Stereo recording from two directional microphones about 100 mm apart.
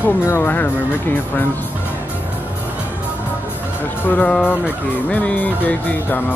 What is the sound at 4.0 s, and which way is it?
Speech, 15° left (ahead or behind).